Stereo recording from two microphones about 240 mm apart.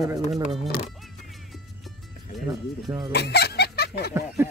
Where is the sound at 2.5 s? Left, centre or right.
Centre.